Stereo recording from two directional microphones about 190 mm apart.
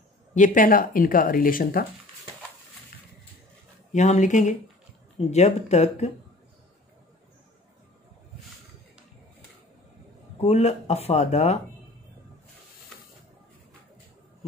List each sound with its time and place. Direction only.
0.3 s speech: 45° left (ahead or behind)
3.9 s speech: 40° left (ahead or behind)
10.4 s speech: 35° left (ahead or behind)